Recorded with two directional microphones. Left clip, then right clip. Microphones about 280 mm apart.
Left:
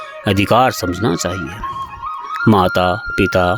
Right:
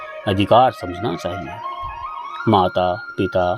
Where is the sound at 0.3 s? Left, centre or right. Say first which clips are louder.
Left 1 dB; left.